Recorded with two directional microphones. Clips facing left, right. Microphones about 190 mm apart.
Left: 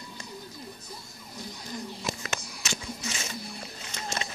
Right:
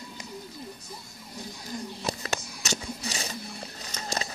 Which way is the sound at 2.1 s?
40° right (ahead or behind).